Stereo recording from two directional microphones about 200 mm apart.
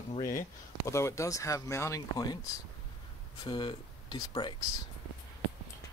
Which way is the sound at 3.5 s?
25° left (ahead or behind).